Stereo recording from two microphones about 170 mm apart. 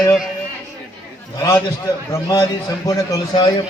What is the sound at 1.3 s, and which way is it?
A man's voice, 20° left (ahead or behind).